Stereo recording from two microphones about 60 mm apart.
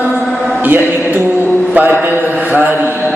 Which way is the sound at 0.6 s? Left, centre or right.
Right.